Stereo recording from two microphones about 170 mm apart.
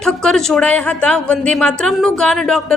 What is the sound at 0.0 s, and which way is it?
A woman's voice, 5° left (ahead or behind).